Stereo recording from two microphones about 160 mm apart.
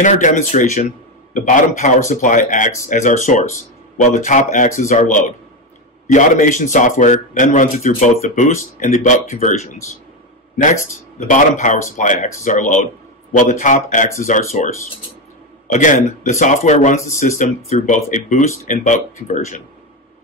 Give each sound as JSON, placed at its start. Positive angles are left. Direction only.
{"t": 0.0, "sound": "a man's voice", "side_deg": 50}